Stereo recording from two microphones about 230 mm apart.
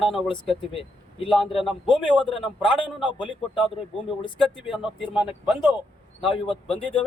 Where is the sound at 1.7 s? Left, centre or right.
Centre.